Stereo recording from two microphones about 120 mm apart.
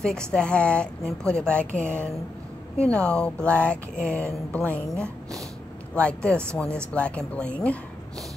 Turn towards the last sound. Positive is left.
turn(degrees=10)  # may be behind; listen again after turning